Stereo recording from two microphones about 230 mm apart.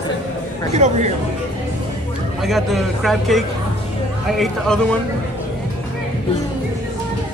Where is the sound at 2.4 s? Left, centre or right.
Centre.